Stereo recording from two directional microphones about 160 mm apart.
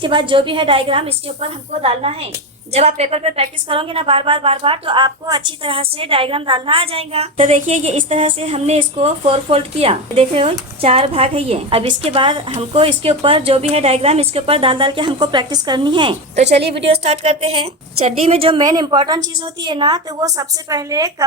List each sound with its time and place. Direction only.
0.0 s a woman's voice: 30° right (ahead or behind)
16.3 s a woman's voice: 45° right (ahead or behind); by 21.2 s 20° right (ahead or behind)